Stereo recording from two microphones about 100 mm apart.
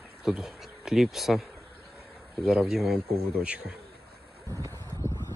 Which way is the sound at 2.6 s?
5° right (ahead or behind).